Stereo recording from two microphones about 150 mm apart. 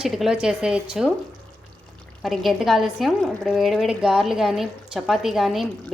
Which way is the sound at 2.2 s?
Centre (ahead or behind).